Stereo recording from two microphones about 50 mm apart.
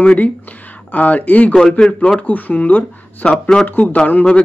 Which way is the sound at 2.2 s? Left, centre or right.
Left.